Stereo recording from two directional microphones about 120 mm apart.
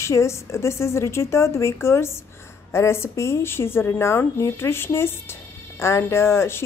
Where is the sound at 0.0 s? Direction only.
25° left (ahead or behind).